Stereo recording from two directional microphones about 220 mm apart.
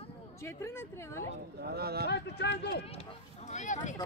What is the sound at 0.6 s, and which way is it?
Speech, 10° left (ahead or behind).